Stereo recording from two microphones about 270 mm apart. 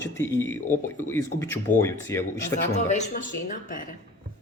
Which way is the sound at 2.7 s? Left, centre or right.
Left.